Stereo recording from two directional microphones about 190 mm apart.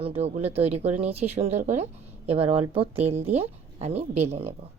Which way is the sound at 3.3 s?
35° right (ahead or behind).